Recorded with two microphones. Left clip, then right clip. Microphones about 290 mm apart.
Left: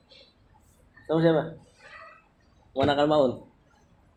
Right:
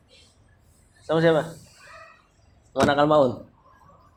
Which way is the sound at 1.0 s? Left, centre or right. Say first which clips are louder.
Right 3 dB; right.